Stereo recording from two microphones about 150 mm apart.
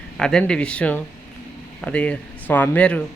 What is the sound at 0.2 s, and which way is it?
Speech, 5° left (ahead or behind).